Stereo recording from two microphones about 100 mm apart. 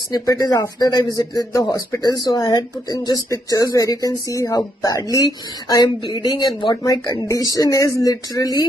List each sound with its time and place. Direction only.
0.1 s speech: 35° left (ahead or behind)